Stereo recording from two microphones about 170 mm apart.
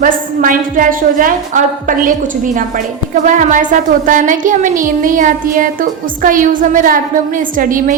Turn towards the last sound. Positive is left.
turn(degrees=-50)  # may be behind; listen again after turning